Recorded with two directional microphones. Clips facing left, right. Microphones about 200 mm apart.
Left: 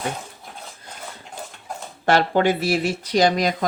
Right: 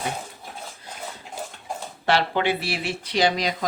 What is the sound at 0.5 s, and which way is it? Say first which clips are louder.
Dog: right 1 dB; 5° right (ahead or behind).